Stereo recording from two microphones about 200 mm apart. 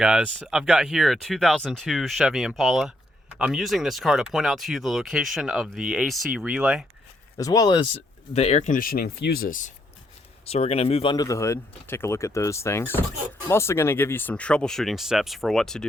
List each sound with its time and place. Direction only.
0.0 s speech: 5° right (ahead or behind)
7.3 s speech: 20° left (ahead or behind)
8.3 s speech: 30° left (ahead or behind)
10.4 s speech: 30° left (ahead or behind); by 15.9 s centre (ahead or behind)